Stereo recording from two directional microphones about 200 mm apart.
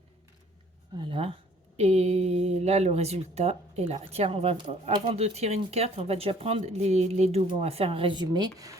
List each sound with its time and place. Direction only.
0.9 s speech: 25° right (ahead or behind)